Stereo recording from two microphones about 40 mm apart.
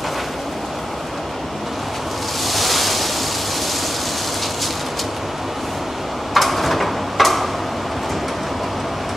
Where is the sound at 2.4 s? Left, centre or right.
Centre.